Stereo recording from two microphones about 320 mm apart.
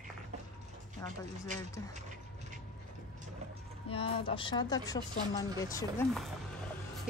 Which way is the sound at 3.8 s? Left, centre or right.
Centre.